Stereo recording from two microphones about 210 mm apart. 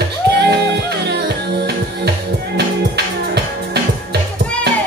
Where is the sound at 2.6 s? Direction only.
50° right (ahead or behind).